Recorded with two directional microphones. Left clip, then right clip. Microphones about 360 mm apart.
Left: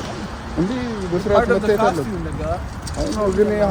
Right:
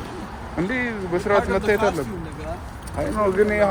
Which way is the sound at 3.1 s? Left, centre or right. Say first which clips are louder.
Left 1 dB; right.